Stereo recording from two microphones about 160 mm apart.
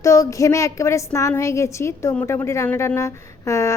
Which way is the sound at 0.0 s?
20° left (ahead or behind).